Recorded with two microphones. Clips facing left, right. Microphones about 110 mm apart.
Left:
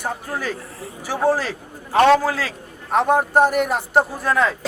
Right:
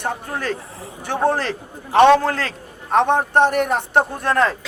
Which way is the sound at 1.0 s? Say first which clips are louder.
Even; 5° left (ahead or behind).